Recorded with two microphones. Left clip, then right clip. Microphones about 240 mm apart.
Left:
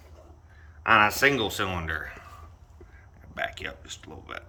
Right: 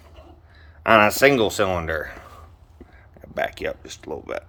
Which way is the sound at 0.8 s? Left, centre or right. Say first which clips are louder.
Right 5 dB; right.